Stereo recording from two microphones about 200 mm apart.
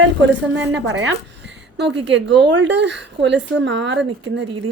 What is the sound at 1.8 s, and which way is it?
Speech, 60° right (ahead or behind).